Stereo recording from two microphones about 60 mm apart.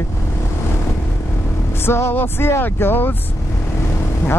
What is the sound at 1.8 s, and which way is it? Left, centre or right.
Music, left.